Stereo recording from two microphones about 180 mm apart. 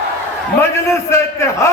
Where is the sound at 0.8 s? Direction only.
15° left (ahead or behind).